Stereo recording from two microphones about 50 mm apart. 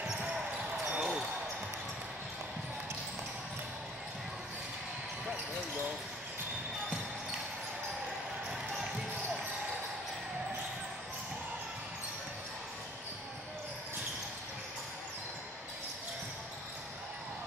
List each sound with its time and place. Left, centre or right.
0.8 s basketball bounce: centre